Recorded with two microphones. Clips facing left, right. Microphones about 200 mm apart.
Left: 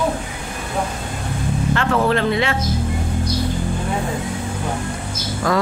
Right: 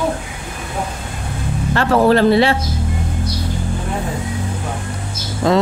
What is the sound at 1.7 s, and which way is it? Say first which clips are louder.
Speech: right 6 dB; 35° right (ahead or behind).